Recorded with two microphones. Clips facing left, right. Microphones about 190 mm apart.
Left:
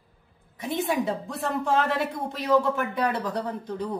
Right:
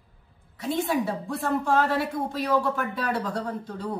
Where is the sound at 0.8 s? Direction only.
20° left (ahead or behind).